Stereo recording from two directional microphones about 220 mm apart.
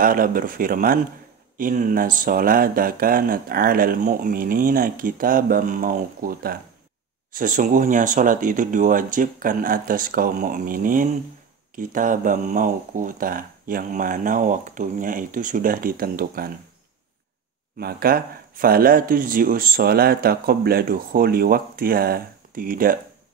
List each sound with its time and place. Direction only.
0.0 s speech: 40° right (ahead or behind)
17.7 s speech: 45° right (ahead or behind)